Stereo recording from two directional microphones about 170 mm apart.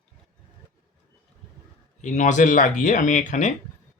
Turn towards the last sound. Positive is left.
turn(degrees=45)  # may be behind; listen again after turning